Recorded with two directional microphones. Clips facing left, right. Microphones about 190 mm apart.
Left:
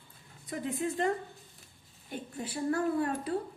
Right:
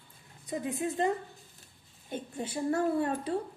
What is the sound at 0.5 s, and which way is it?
A woman's voice, 20° right (ahead or behind).